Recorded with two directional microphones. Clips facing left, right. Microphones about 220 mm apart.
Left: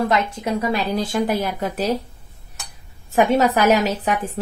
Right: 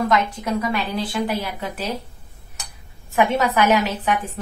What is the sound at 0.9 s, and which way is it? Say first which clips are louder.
Speech: left 3 dB; 45° left (ahead or behind).